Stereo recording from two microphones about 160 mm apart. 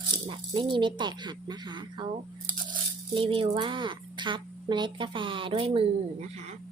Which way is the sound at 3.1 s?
30° right (ahead or behind).